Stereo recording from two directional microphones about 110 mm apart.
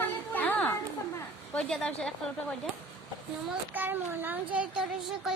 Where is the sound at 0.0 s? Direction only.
15° left (ahead or behind).